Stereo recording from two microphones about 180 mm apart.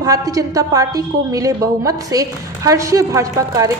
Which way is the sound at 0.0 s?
20° right (ahead or behind).